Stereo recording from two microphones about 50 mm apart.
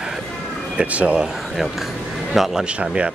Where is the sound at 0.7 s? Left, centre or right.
Right.